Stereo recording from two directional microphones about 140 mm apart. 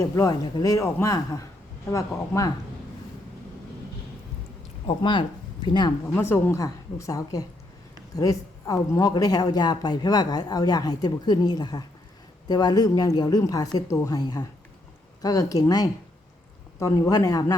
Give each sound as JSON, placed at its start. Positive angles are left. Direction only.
{"t": 0.0, "sound": "a woman's voice", "side_deg": 25}
{"t": 4.9, "sound": "speech", "side_deg": 35}
{"t": 6.1, "sound": "a woman's voice", "side_deg": 15}